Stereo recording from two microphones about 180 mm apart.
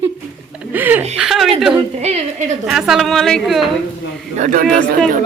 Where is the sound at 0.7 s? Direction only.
10° right (ahead or behind).